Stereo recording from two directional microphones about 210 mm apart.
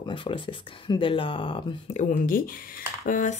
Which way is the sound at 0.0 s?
25° left (ahead or behind).